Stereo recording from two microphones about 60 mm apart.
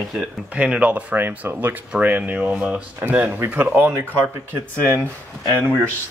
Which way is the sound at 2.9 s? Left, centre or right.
Right.